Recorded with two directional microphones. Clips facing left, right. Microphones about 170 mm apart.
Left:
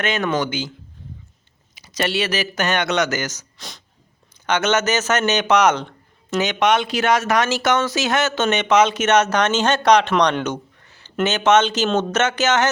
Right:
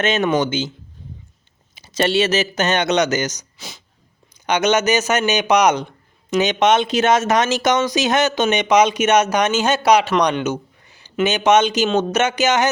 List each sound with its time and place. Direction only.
0.0 s speech: 20° right (ahead or behind)
1.7 s speech: 25° right (ahead or behind)
3.6 s speech: 5° right (ahead or behind)
4.4 s speech: 15° right (ahead or behind)